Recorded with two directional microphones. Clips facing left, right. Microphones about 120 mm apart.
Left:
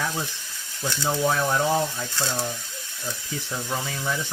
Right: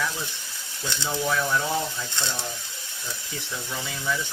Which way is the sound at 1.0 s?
35° left (ahead or behind).